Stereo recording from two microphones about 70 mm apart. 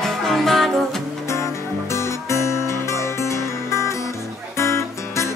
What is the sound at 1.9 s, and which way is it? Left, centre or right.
Music, left.